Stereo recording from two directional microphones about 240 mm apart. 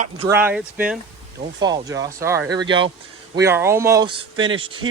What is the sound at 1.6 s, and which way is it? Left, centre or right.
Speech, centre.